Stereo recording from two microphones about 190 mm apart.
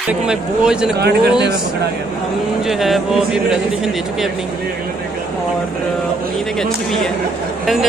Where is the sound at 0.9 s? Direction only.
60° right (ahead or behind).